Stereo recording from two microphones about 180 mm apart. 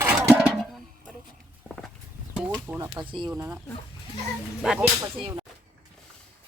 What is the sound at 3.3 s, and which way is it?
Speech, 15° right (ahead or behind).